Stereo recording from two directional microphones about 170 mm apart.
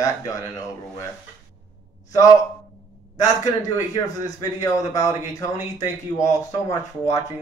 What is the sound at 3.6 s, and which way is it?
Speech, 20° left (ahead or behind).